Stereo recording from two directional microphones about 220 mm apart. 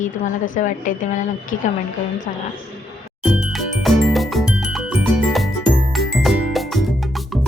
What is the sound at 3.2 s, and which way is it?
Music, centre (ahead or behind).